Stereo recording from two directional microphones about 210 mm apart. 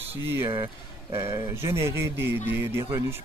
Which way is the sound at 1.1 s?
10° right (ahead or behind).